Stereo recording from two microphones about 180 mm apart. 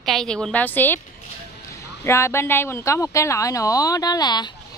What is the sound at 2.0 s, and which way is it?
A woman's voice, 15° left (ahead or behind).